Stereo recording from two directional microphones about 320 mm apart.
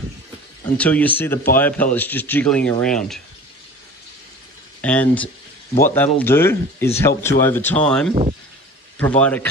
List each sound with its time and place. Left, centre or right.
0.7 s speech: centre
4.8 s speech: centre
8.1 s speech: centre
9.0 s speech: centre